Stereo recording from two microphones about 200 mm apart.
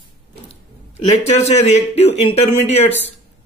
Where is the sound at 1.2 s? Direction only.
35° left (ahead or behind).